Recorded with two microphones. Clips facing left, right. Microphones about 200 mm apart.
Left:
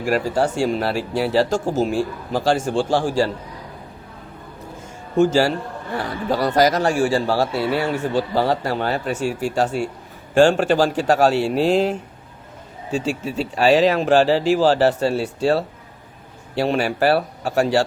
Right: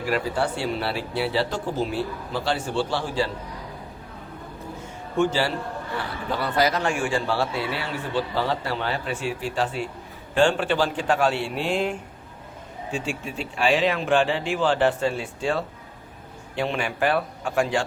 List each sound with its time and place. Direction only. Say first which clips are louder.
0.0 s speech: left 5 dB; 45° left (ahead or behind)
5.1 s speech: left 6 dB; 40° left (ahead or behind)